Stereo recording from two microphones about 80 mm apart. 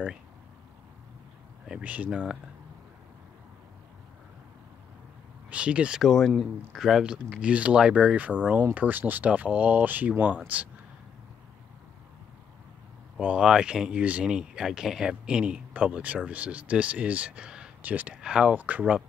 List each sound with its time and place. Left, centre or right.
1.7 s speech: centre
5.5 s speech: centre
6.0 s speech: centre
13.2 s speech: centre